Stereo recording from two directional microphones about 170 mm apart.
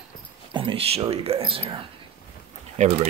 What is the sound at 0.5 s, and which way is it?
Speech, 30° right (ahead or behind).